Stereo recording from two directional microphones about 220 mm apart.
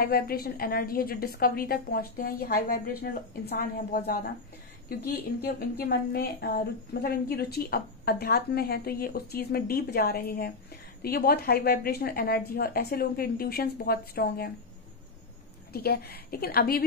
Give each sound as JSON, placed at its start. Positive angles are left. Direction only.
{"t": 0.0, "sound": "a woman's voice", "side_deg": 45}
{"t": 15.7, "sound": "a woman's voice", "side_deg": 45}